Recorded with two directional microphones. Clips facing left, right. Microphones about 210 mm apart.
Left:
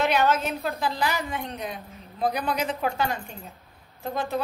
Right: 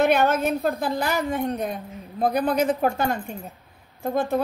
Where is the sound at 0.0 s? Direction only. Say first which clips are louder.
Right 4 dB; 50° right (ahead or behind).